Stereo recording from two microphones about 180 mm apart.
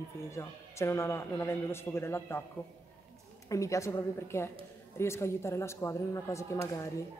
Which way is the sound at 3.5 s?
15° left (ahead or behind).